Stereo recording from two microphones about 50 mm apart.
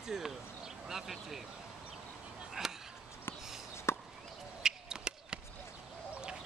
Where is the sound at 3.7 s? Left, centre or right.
Left.